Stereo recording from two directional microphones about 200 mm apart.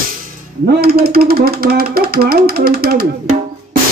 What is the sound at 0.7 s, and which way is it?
Speech, 50° right (ahead or behind).